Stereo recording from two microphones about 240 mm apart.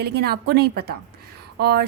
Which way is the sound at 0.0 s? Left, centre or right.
Right.